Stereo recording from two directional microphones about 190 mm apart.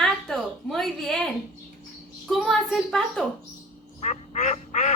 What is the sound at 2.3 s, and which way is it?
Speech, centre (ahead or behind).